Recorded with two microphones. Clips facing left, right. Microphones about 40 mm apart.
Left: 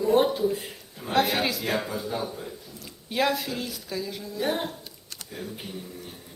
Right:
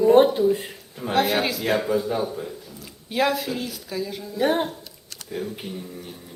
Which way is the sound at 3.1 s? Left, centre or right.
Centre.